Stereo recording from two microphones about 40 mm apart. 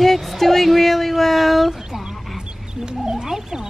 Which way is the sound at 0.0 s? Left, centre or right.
Centre.